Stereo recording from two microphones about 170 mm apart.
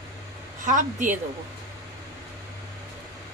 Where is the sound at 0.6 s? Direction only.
50° right (ahead or behind).